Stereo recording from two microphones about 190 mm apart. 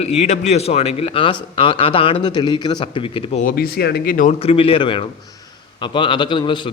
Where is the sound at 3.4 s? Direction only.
55° left (ahead or behind).